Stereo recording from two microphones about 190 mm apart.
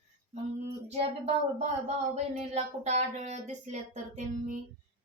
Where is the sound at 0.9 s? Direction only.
35° right (ahead or behind).